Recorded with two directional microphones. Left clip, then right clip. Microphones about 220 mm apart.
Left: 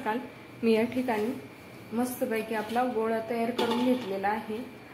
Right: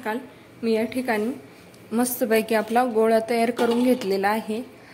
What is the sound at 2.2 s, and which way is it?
Speech, 50° right (ahead or behind).